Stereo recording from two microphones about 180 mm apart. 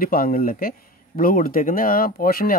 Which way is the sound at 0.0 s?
50° left (ahead or behind).